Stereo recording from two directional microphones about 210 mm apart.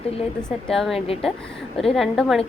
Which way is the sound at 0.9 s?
30° left (ahead or behind).